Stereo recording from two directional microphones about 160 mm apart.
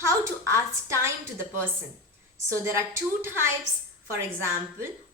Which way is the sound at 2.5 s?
15° right (ahead or behind).